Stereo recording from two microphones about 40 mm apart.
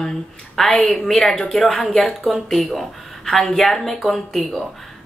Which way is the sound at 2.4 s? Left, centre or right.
Centre.